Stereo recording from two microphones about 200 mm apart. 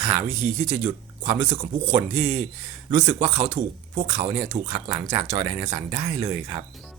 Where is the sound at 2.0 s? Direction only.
10° right (ahead or behind).